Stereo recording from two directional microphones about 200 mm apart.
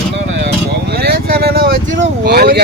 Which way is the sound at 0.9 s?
50° right (ahead or behind).